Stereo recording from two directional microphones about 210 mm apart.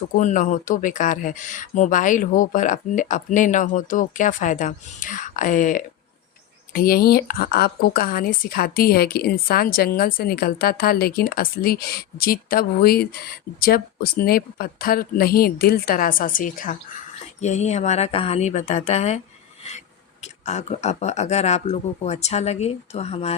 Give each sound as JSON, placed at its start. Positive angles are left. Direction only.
{"t": 0.1, "sound": "speech", "side_deg": 35}
{"t": 20.2, "sound": "speech", "side_deg": 35}